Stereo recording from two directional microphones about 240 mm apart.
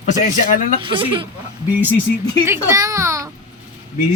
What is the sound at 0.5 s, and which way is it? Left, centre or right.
Speech, left.